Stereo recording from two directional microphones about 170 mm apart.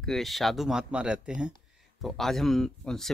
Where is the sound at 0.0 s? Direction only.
Centre (ahead or behind).